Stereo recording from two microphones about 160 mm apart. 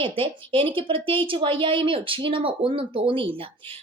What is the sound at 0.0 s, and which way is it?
A woman's voice, 35° right (ahead or behind).